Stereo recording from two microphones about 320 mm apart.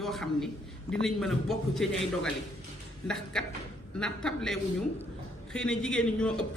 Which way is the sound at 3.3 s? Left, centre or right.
Centre.